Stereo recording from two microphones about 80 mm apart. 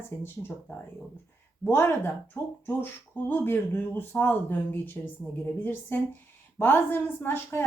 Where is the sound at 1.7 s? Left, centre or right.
Left.